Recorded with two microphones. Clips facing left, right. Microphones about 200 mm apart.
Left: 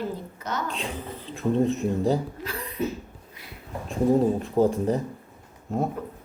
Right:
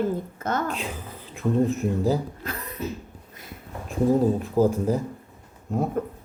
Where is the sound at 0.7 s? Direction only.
Centre (ahead or behind).